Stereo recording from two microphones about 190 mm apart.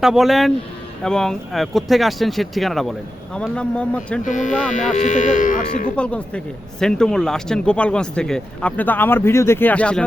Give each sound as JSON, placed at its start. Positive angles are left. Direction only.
{"t": 0.0, "sound": "speech", "side_deg": 0}
{"t": 4.3, "sound": "speech", "side_deg": 40}
{"t": 6.0, "sound": "speech", "side_deg": 5}